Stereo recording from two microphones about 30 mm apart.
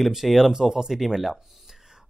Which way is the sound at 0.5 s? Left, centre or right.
Right.